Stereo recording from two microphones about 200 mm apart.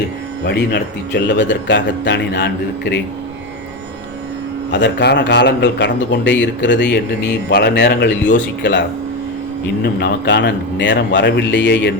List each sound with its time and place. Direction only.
0.4 s speech: 55° left (ahead or behind)
4.7 s speech: 60° left (ahead or behind)